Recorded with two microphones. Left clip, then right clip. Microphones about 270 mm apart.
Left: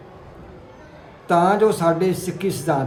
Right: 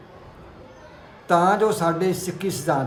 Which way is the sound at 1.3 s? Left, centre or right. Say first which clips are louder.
Left 2 dB; centre.